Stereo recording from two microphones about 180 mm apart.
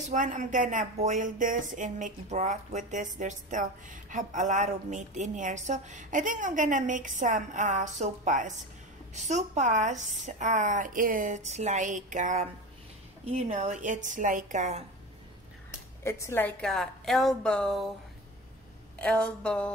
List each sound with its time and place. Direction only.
0.1 s speech: 45° right (ahead or behind)
16.0 s a woman's voice: 15° left (ahead or behind)
18.9 s a woman's voice: 5° left (ahead or behind)